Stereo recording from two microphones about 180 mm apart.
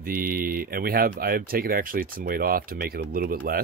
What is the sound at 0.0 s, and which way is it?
Speech, 55° right (ahead or behind).